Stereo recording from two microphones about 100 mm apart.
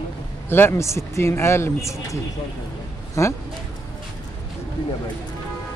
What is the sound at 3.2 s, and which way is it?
Speech, 30° left (ahead or behind).